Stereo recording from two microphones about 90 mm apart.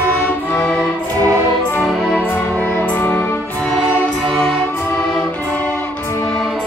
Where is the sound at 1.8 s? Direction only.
Centre (ahead or behind).